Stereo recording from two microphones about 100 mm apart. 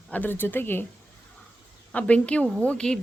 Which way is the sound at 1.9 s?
15° left (ahead or behind).